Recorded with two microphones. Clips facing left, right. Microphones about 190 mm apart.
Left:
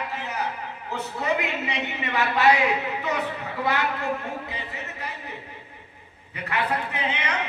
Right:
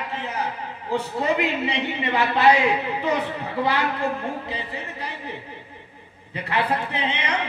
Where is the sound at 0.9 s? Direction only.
30° right (ahead or behind).